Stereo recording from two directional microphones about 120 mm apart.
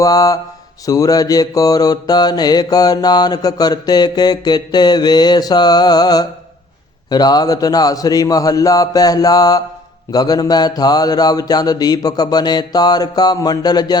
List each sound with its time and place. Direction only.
0.0 s speech: 30° left (ahead or behind)
0.9 s mantra: 30° left (ahead or behind)